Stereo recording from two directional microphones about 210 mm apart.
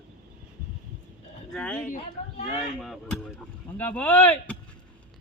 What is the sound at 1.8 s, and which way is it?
Speech, 35° left (ahead or behind).